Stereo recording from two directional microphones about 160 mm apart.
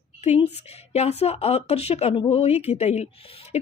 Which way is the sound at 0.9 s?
40° left (ahead or behind).